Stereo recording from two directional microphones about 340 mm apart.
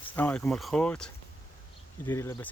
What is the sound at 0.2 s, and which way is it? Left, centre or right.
Speech, centre.